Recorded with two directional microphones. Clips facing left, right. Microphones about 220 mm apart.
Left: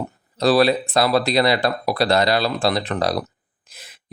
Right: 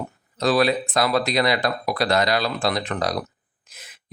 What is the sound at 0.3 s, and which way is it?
Speech, 35° left (ahead or behind).